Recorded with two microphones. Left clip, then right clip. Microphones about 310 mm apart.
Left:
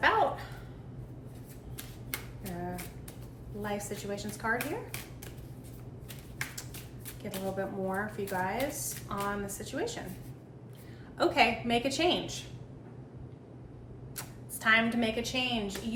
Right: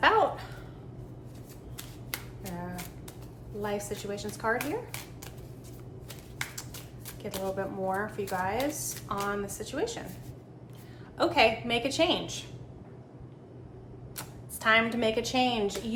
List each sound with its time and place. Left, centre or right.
2.0 s finger snapping: centre
3.6 s speech: centre
7.2 s speech: centre
11.2 s speech: centre
14.2 s a woman's voice: centre